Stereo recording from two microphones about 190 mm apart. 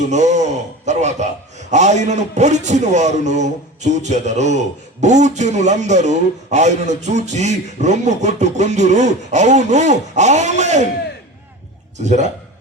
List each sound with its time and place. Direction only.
0.1 s a man's voice: 40° right (ahead or behind)